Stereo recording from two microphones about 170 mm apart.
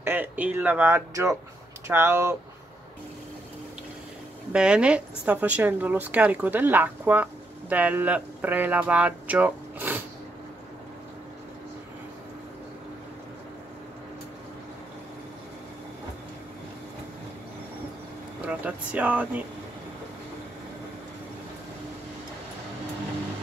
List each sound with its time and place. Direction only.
0.0 s speech: 10° right (ahead or behind)
4.5 s speech: 5° right (ahead or behind)
18.5 s speech: 10° right (ahead or behind)